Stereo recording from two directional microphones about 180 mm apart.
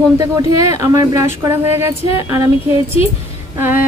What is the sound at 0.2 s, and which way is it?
Speech, 20° right (ahead or behind).